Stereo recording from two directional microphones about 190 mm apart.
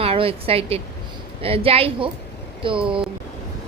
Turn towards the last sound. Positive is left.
turn(degrees=-25)  # may be behind; listen again after turning